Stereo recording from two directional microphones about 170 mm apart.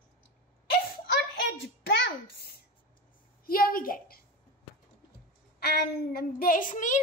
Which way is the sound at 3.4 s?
60° left (ahead or behind).